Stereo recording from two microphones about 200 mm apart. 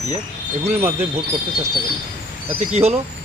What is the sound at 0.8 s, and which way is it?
Speech, 10° right (ahead or behind).